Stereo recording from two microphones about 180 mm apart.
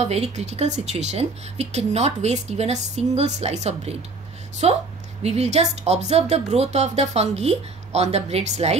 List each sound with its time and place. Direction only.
0.0 s speech: 40° right (ahead or behind)